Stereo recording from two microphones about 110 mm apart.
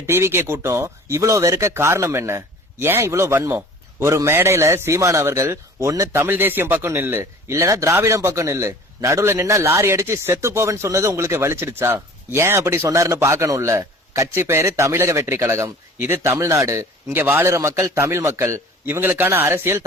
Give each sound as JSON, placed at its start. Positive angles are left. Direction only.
{"t": 0.0, "sound": "a man's voice", "side_deg": -20}